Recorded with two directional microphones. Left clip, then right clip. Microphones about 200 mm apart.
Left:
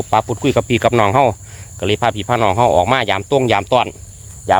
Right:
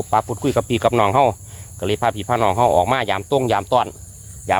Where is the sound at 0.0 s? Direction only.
20° left (ahead or behind).